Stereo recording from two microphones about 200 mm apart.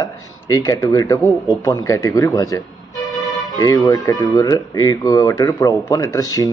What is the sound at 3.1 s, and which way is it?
Music, 20° left (ahead or behind).